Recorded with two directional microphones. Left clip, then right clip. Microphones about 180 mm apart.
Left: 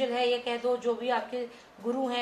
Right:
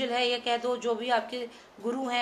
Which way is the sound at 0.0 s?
55° right (ahead or behind).